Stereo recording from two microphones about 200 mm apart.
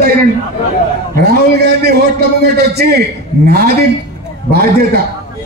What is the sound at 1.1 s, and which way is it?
A man's voice, 55° right (ahead or behind).